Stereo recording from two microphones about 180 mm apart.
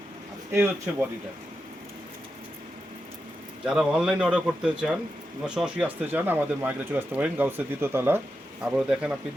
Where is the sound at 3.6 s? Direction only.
5° right (ahead or behind).